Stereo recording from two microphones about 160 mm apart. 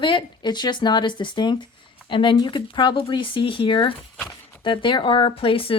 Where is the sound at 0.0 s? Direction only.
30° left (ahead or behind).